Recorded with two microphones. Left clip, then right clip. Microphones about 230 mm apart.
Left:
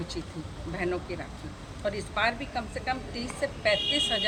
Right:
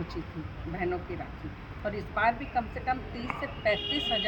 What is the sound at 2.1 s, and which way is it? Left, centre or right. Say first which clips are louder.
Speech: right 3 dB; centre.